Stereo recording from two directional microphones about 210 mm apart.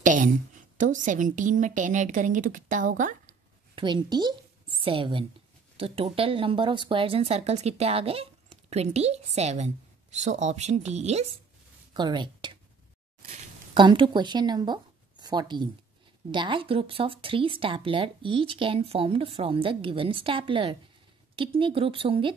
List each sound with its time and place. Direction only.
0.0 s a sound: 40° right (ahead or behind)
0.7 s a woman's voice: 35° right (ahead or behind)
3.7 s a woman's voice: 20° right (ahead or behind)
11.9 s speech: 20° right (ahead or behind)
13.7 s speech: 20° right (ahead or behind)